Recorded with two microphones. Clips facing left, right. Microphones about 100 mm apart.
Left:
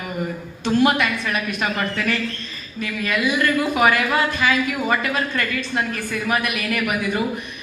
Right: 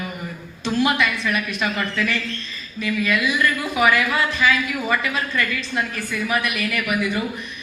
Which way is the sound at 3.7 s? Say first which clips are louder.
Right 1 dB; 45° left (ahead or behind).